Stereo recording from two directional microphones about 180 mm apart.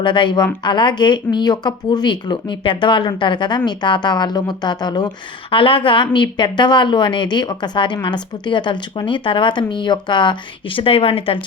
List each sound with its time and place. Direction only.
0.0 s a woman's voice: 25° left (ahead or behind)